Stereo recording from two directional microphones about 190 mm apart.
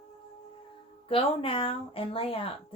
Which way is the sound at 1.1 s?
30° left (ahead or behind).